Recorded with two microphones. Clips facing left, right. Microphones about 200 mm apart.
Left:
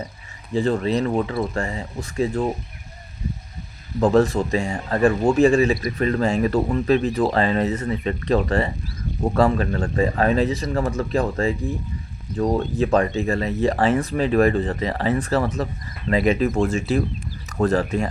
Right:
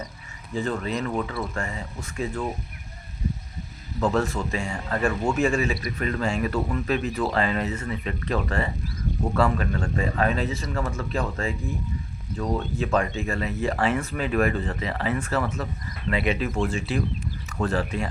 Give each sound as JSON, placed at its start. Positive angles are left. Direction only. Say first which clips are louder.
{"t": 0.5, "sound": "speech", "louder": "left 7 dB", "side_deg": 30}
{"t": 4.0, "sound": "speech", "louder": "left 7 dB", "side_deg": 35}